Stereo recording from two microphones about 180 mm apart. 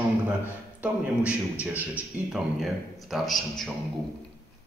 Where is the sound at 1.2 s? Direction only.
10° right (ahead or behind).